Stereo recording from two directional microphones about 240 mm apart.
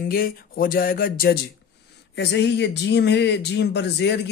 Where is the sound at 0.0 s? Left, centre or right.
Left.